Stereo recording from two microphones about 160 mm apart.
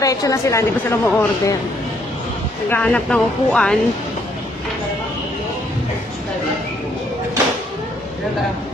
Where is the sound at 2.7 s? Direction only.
5° left (ahead or behind).